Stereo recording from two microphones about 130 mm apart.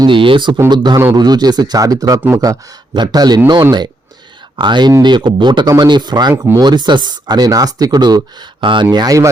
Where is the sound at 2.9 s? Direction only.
30° right (ahead or behind).